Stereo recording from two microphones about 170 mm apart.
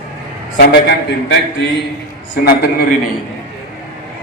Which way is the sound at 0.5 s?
85° left.